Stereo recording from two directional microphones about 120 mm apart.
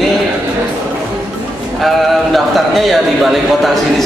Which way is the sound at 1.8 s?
Centre (ahead or behind).